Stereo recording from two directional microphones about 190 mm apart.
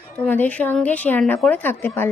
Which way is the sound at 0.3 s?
10° left (ahead or behind).